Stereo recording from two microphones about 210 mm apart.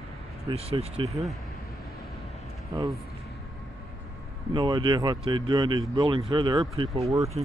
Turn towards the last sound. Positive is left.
turn(degrees=-15)  # may be behind; listen again after turning